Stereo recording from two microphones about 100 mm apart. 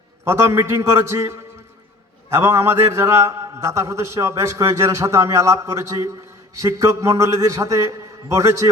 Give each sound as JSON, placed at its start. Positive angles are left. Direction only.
{"t": 0.3, "sound": "a man's voice", "side_deg": -25}